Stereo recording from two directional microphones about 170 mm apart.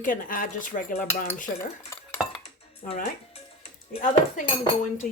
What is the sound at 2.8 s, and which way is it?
Cutlery, 50° left (ahead or behind).